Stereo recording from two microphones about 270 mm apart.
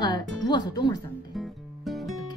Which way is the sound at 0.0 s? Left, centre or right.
Centre.